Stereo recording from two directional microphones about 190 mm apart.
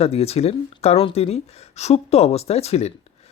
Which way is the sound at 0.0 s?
30° left (ahead or behind).